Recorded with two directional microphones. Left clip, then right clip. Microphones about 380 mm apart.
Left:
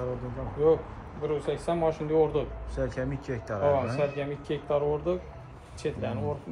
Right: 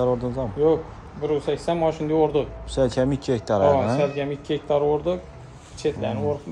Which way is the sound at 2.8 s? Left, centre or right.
Centre.